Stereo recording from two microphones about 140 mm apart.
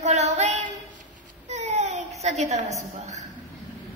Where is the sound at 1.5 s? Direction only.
55° right (ahead or behind).